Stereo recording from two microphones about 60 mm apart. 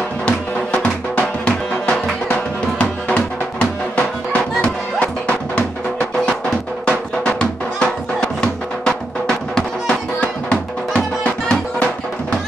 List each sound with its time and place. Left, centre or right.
0.2 s music: left
6.9 s music: centre